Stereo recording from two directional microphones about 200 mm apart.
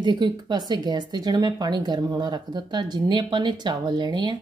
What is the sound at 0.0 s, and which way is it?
Speech, 20° right (ahead or behind).